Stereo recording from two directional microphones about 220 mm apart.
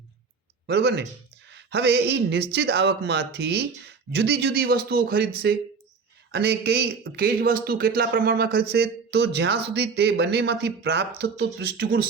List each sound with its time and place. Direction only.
0.7 s speech: 50° right (ahead or behind)